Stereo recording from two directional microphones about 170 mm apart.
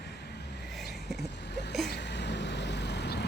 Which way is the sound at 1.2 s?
85° left.